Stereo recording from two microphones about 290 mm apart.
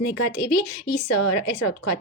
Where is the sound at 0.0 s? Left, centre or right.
Left.